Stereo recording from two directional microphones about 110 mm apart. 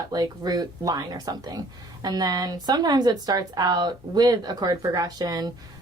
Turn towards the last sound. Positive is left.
turn(degrees=-35)  # may be behind; listen again after turning